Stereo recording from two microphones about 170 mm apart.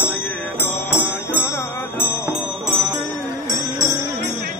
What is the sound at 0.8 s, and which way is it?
Music, 15° left (ahead or behind).